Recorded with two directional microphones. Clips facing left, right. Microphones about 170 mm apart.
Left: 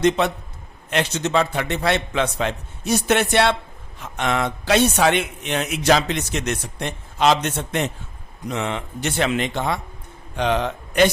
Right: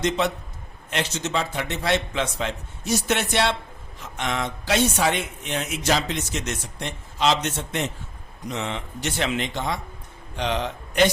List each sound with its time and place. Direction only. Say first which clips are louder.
0.9 s a man's voice: left 5 dB; 60° left (ahead or behind)